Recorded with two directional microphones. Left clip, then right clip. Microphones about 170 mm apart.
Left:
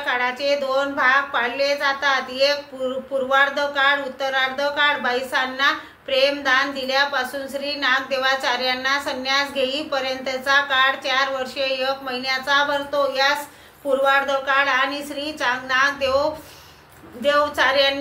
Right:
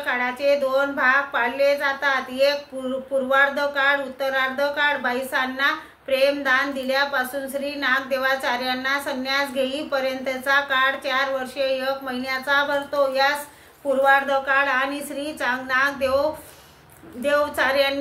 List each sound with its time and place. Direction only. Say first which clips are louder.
0.0 s a woman's voice: left 1 dB; 20° right (ahead or behind)